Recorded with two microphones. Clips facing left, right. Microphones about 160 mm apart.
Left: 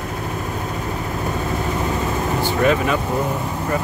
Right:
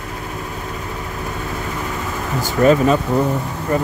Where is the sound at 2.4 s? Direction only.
40° right (ahead or behind).